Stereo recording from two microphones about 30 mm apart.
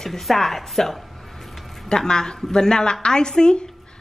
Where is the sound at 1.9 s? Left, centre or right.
Left.